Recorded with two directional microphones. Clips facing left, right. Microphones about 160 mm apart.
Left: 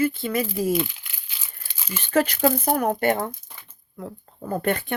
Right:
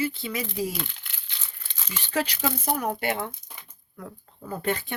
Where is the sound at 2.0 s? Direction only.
50° left (ahead or behind).